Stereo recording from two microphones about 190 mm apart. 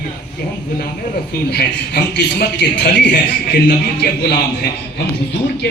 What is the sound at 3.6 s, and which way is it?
A man's voice, 55° left (ahead or behind).